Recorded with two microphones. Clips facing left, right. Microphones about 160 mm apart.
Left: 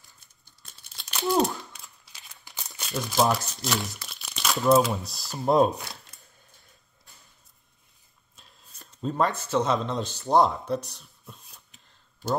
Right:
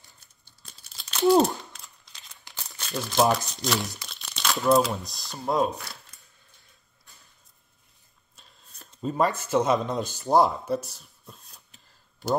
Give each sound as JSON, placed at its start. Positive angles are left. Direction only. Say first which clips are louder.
{"t": 0.7, "sound": "crumpling", "louder": "even", "side_deg": 0}
{"t": 3.1, "sound": "speech", "louder": "right 2 dB", "side_deg": 0}
{"t": 5.4, "sound": "speech", "louder": "left 4 dB", "side_deg": 25}
{"t": 8.4, "sound": "whispering", "louder": "even", "side_deg": 0}
{"t": 9.0, "sound": "speech", "louder": "right 1 dB", "side_deg": -5}